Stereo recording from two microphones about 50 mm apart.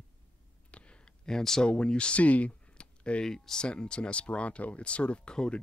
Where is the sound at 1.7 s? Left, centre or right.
Centre.